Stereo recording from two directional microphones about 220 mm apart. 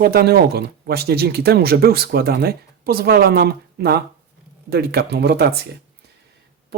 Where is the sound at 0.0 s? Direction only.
45° right (ahead or behind).